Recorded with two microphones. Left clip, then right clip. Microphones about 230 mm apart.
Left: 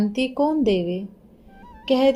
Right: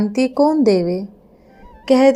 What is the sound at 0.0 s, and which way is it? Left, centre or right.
Speech, right.